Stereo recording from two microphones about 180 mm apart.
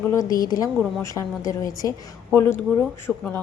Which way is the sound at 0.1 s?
20° left (ahead or behind).